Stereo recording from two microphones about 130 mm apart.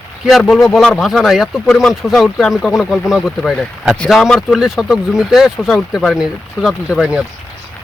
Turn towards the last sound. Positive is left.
turn(degrees=-5)  # may be behind; listen again after turning